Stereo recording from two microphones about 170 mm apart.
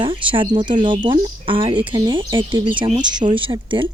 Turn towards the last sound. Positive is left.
turn(degrees=-30)  # may be behind; listen again after turning